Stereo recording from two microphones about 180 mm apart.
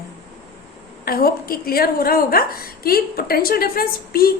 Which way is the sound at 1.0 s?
55° left (ahead or behind).